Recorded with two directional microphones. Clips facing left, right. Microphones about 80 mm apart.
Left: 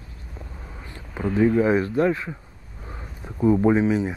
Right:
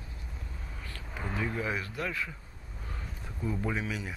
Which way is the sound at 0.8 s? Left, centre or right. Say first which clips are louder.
Left 8 dB; left.